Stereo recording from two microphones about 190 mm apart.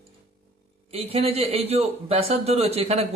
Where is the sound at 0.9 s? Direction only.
30° right (ahead or behind).